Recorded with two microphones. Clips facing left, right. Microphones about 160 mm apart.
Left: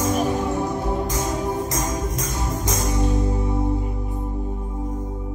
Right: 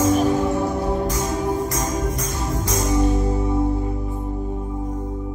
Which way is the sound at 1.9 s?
15° left (ahead or behind).